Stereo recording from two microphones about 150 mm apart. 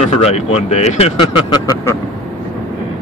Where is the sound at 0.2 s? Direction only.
45° left (ahead or behind).